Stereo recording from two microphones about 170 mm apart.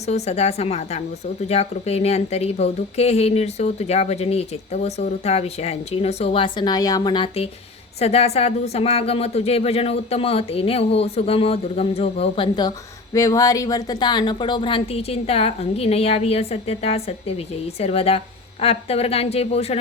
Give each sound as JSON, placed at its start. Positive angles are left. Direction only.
{"t": 0.0, "sound": "a woman's voice", "side_deg": 40}